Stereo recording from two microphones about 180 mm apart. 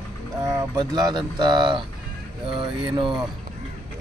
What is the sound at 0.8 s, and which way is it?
Speech, 25° right (ahead or behind).